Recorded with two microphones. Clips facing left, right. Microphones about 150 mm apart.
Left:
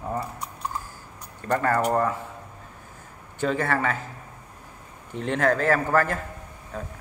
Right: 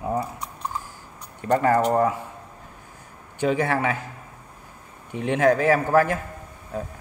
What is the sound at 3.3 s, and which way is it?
Speech, 15° right (ahead or behind).